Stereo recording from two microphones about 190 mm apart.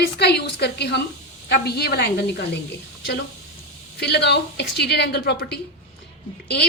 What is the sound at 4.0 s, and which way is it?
A woman's voice, 60° left (ahead or behind).